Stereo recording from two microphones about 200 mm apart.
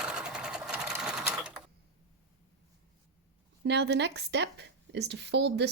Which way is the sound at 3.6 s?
60° right (ahead or behind).